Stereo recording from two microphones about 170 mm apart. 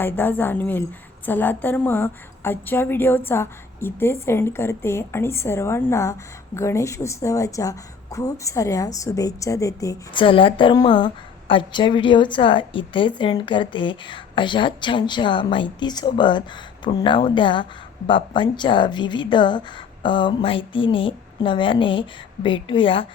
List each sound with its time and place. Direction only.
0.0 s a woman's voice: 10° left (ahead or behind); by 23.0 s 30° left (ahead or behind)